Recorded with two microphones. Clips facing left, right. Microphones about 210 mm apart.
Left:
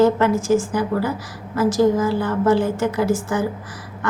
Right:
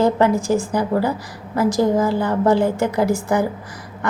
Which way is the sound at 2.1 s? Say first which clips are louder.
Right 1 dB; 15° right (ahead or behind).